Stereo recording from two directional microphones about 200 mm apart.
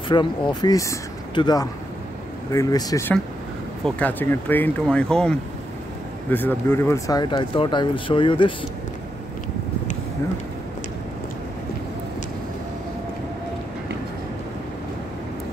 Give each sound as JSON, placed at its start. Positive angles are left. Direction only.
{"t": 0.1, "sound": "speech", "side_deg": 20}